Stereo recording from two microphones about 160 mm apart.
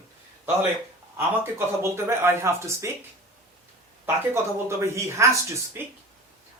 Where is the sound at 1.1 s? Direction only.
15° right (ahead or behind).